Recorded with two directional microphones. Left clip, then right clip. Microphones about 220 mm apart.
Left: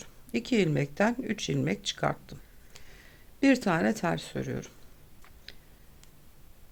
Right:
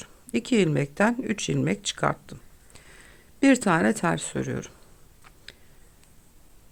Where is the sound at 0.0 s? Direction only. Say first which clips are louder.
Right 4 dB; 20° right (ahead or behind).